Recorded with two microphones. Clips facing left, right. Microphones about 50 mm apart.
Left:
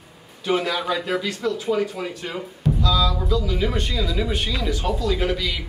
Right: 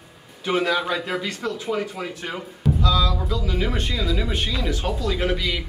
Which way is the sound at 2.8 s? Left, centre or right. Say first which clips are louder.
Left 1 dB; centre.